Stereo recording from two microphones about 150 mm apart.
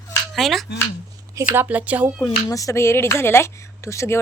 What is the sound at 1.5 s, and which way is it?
Speech, 10° right (ahead or behind).